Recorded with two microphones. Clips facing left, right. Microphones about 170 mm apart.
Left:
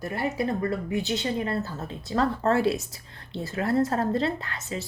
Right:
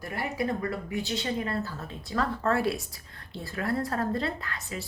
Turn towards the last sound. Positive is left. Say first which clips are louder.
# left 4 dB
turn(degrees=25)  # may be behind; listen again after turning